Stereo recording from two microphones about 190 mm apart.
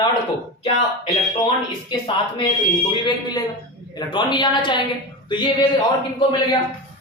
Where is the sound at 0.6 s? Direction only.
25° left (ahead or behind).